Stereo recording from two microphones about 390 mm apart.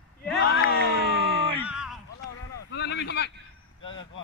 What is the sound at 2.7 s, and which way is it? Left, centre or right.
Speech, left.